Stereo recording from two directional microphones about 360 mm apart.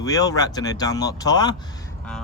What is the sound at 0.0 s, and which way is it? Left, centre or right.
Speech, centre.